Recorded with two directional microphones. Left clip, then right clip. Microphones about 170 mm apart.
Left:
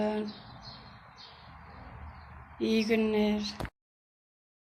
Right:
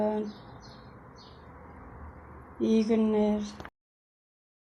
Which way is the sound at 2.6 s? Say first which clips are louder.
Right 2 dB; 30° right (ahead or behind).